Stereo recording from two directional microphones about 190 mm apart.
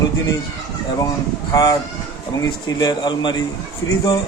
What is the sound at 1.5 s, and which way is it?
Speech, 20° left (ahead or behind).